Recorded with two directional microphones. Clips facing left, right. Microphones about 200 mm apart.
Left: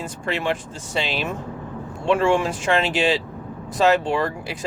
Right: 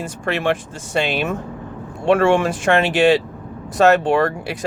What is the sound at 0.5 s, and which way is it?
Speech, 50° right (ahead or behind).